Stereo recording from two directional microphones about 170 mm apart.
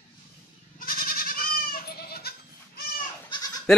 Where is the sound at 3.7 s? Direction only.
5° left (ahead or behind).